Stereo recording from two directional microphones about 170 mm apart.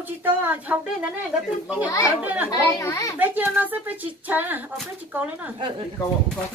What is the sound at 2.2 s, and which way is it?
Speech, 10° right (ahead or behind).